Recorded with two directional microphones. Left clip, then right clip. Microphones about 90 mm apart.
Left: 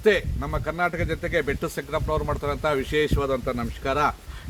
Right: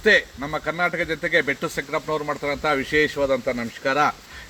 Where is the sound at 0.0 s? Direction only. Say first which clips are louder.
Right 4 dB; 35° left (ahead or behind).